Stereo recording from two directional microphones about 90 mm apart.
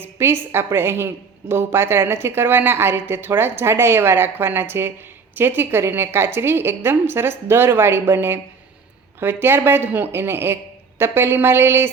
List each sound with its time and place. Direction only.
0.0 s a woman's voice: 25° right (ahead or behind)